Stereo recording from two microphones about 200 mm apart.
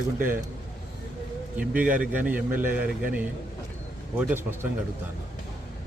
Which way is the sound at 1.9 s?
10° right (ahead or behind).